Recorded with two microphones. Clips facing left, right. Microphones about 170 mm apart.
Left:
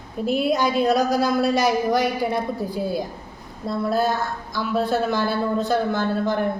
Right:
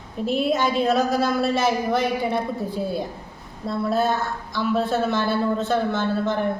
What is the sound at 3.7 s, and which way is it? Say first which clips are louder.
A woman's voice: even; centre (ahead or behind).